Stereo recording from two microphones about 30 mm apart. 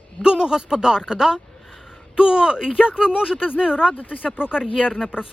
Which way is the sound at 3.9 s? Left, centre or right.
Left.